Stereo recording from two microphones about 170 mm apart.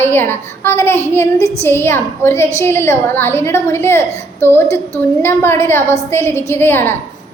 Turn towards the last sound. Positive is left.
turn(degrees=15)  # may be behind; listen again after turning